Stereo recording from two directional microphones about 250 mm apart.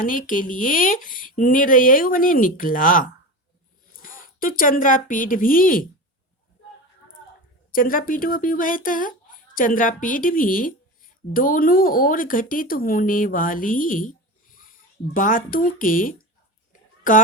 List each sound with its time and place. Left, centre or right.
0.0 s a woman's voice: left
7.7 s speech: left